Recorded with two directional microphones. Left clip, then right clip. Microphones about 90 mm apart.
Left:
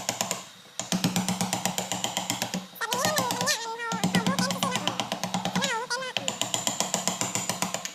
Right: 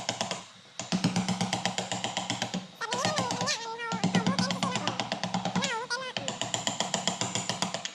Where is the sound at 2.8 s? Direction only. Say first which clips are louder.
Left 3 dB; 25° left (ahead or behind).